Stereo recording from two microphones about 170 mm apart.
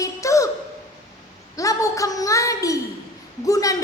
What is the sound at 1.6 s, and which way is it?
A woman's voice, 20° left (ahead or behind).